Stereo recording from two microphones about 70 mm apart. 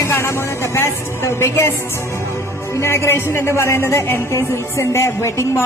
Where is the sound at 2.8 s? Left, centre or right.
Left.